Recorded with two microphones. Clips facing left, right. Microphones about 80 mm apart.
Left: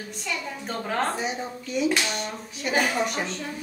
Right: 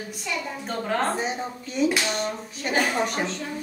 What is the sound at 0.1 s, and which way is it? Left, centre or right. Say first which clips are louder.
A woman's voice: right 1 dB; centre.